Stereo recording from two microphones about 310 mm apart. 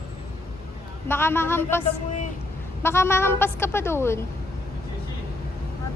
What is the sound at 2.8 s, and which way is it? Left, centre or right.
A woman's voice, centre.